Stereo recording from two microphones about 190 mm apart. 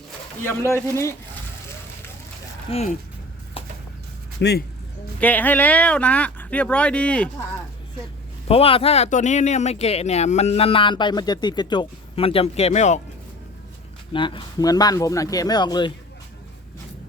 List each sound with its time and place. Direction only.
0.4 s speech: 15° left (ahead or behind)
2.6 s speech: 35° left (ahead or behind)
4.4 s speech: 60° left (ahead or behind)
5.2 s speech: 10° left (ahead or behind)
8.4 s speech: 30° left (ahead or behind)
14.1 s speech: 25° left (ahead or behind)